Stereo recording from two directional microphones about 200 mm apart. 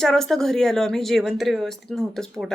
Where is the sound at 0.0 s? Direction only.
Centre (ahead or behind).